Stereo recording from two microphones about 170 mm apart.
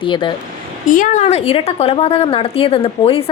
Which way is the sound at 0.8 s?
50° left (ahead or behind).